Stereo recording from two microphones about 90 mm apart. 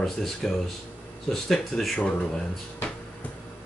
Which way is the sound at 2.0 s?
15° left (ahead or behind).